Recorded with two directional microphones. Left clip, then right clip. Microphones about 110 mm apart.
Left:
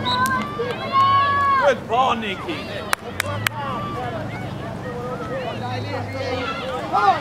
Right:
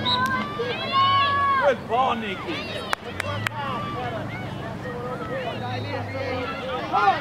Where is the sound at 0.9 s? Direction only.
15° right (ahead or behind).